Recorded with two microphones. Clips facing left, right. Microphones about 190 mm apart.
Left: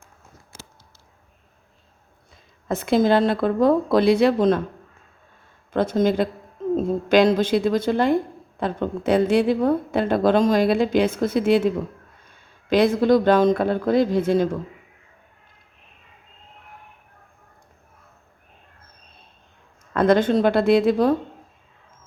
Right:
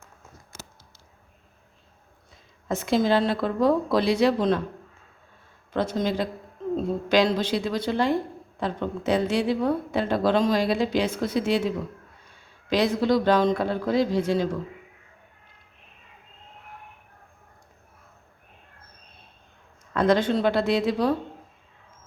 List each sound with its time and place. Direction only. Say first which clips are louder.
2.6 s a woman's voice: left 4 dB; 55° left (ahead or behind)
5.7 s a woman's voice: left 6 dB; 50° left (ahead or behind)
12.7 s a woman's voice: left 5 dB; 50° left (ahead or behind)
19.9 s a woman's voice: left 4 dB; 50° left (ahead or behind)